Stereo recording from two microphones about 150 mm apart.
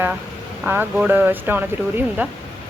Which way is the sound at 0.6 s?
10° right (ahead or behind).